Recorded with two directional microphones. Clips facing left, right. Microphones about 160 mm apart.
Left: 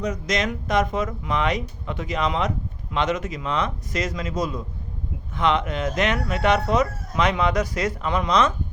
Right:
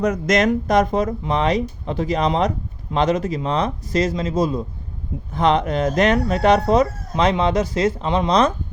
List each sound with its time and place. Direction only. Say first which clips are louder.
0.0 s speech: right 7 dB; 50° right (ahead or behind); by 8.5 s 35° right (ahead or behind)